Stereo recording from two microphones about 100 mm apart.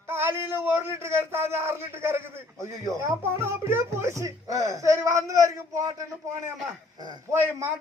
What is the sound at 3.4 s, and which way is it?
A man's voice, 25° right (ahead or behind).